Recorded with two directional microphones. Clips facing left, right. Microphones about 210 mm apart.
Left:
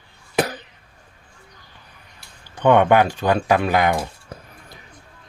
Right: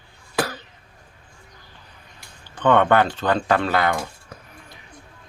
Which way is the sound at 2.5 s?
15° left (ahead or behind).